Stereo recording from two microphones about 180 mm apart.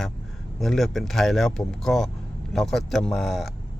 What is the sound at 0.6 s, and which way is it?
Speech, centre (ahead or behind).